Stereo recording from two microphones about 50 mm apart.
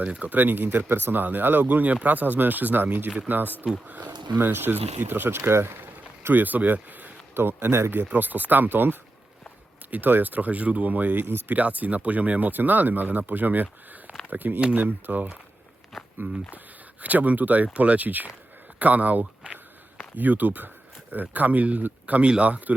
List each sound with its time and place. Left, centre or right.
0.0 s speech: right
0.3 s speech: right
4.5 s speech: right
7.3 s speech: right
7.9 s speech: right
15.9 s walk: centre
17.0 s speech: right